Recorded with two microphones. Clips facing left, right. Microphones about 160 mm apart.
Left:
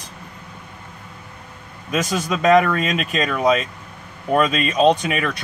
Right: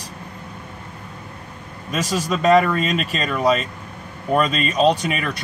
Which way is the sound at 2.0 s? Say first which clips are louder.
Even; 35° right (ahead or behind).